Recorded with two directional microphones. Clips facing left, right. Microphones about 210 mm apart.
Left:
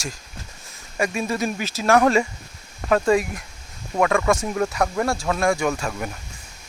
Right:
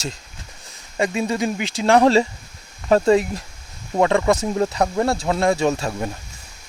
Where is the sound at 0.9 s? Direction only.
20° right (ahead or behind).